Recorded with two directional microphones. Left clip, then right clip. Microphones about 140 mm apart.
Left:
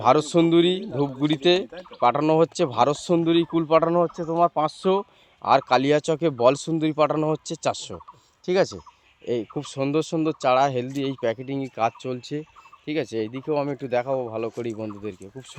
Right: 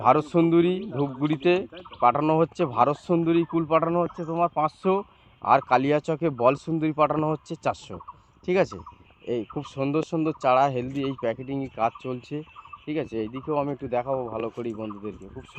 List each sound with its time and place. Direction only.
0.0 s speech: 45° left (ahead or behind)
4.4 s speech: 65° left (ahead or behind)
5.4 s speech: 40° left (ahead or behind)